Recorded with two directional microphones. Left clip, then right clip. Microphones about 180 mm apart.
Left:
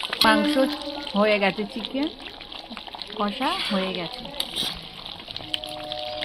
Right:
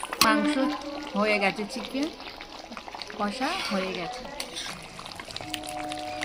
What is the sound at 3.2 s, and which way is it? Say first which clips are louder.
Speech: left 4 dB; 45° left (ahead or behind).